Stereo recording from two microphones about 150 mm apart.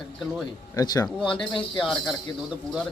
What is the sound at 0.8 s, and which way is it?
Speech, 25° left (ahead or behind).